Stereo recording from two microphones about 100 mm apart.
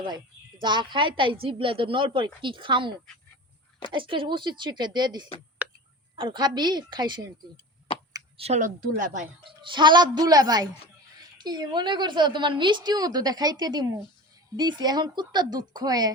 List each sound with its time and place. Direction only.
0.6 s a woman's voice: 50° right (ahead or behind)
3.9 s a woman's voice: 60° right (ahead or behind)
5.6 s a sound: 15° right (ahead or behind)
6.1 s a woman's voice: 50° right (ahead or behind)
9.4 s a woman's voice: 55° right (ahead or behind)